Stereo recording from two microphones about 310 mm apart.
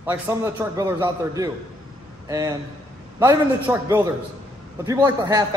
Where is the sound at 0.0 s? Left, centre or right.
Centre.